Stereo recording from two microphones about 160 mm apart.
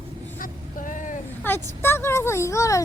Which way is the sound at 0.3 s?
55° left (ahead or behind).